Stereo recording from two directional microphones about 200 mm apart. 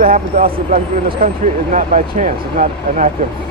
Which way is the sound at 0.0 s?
45° right (ahead or behind).